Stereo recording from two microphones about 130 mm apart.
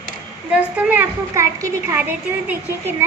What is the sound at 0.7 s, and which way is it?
A woman's voice, 10° right (ahead or behind).